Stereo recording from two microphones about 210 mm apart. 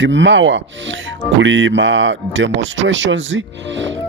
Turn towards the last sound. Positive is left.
turn(degrees=-60)  # may be behind; listen again after turning